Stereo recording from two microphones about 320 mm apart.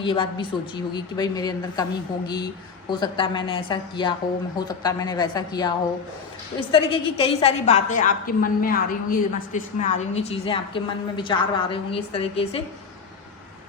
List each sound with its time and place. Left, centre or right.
0.0 s a woman's voice: centre